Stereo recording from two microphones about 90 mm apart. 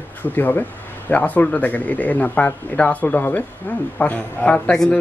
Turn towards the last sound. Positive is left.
turn(degrees=10)  # may be behind; listen again after turning